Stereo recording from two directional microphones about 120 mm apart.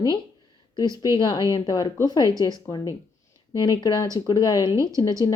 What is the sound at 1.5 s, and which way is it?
A woman's voice, 35° left (ahead or behind).